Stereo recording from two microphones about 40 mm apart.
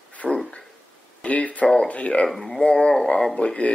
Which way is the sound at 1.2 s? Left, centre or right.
Left.